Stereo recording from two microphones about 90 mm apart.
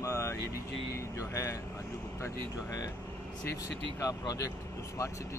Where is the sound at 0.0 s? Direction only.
35° left (ahead or behind).